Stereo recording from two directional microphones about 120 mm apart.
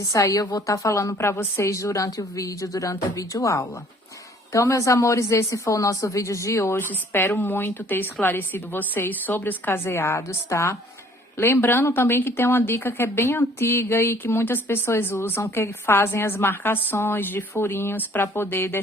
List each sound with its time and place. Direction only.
0.0 s a woman's voice: 25° left (ahead or behind)